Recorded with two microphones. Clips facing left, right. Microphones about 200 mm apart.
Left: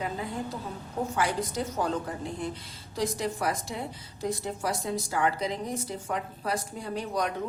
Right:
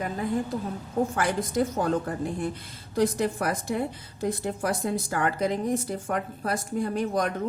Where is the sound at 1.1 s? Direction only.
50° right (ahead or behind).